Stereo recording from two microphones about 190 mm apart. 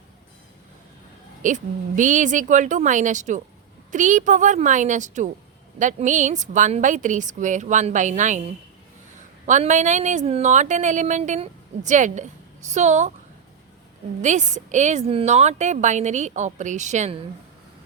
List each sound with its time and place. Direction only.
1.4 s speech: 40° right (ahead or behind)
9.5 s speech: 40° right (ahead or behind)
14.2 s speech: 40° right (ahead or behind)